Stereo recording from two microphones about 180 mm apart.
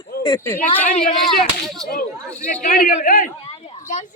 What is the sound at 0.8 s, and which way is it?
Speech, 45° left (ahead or behind).